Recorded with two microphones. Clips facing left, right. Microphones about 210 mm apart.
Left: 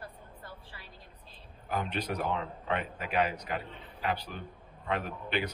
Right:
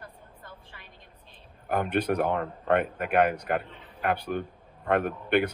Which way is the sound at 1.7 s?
55° right (ahead or behind).